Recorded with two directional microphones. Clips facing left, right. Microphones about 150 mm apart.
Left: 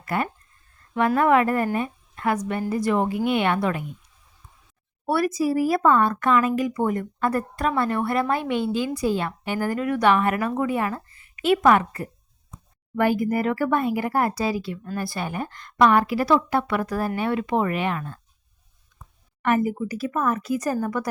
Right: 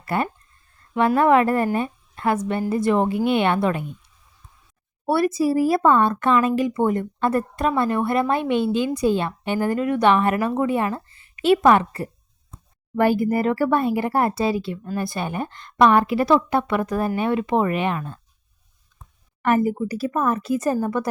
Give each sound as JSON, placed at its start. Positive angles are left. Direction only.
{"t": 0.0, "sound": "a woman's voice", "side_deg": -30}
{"t": 5.0, "sound": "a woman's voice", "side_deg": -25}
{"t": 19.4, "sound": "a woman's voice", "side_deg": -35}